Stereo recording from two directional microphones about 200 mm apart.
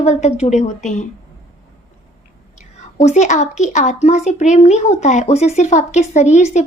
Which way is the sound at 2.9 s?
35° left (ahead or behind).